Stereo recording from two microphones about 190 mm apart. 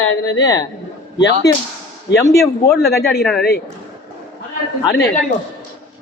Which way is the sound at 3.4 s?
55° left (ahead or behind).